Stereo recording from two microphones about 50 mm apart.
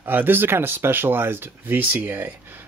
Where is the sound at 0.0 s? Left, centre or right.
Right.